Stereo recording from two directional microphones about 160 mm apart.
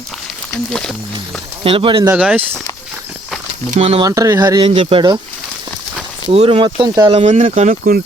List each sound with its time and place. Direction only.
0.7 s speech: 5° left (ahead or behind)
1.6 s speech: 35° right (ahead or behind)
2.1 s speech: 10° right (ahead or behind)
3.8 s speech: 40° right (ahead or behind)
4.0 s speech: 20° right (ahead or behind)
6.2 s speech: 35° right (ahead or behind)
7.1 s speech: 45° right (ahead or behind)